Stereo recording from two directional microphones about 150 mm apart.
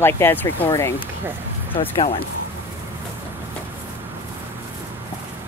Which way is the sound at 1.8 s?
40° left (ahead or behind).